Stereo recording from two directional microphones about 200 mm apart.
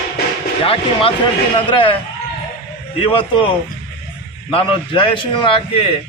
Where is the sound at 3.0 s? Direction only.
25° left (ahead or behind).